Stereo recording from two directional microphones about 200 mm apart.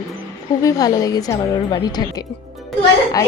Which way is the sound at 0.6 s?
20° left (ahead or behind).